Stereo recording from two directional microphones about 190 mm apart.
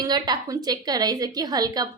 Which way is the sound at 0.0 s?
20° right (ahead or behind).